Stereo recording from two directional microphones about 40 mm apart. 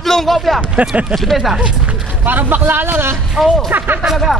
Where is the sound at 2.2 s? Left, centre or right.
Right.